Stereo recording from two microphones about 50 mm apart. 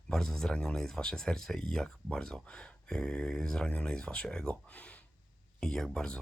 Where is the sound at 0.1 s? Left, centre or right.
Centre.